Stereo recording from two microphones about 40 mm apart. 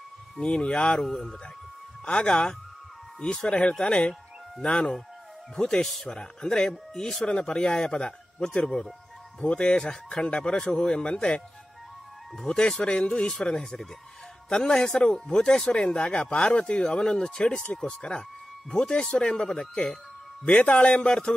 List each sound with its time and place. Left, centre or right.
0.4 s speech: left
1.0 s speech: centre
2.0 s a man's voice: left
7.2 s speech: left
12.4 s a man's voice: centre
15.9 s a man's voice: left
20.4 s speech: left